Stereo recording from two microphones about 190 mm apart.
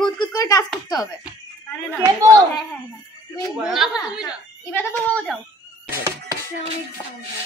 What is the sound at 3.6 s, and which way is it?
Speech, 5° right (ahead or behind).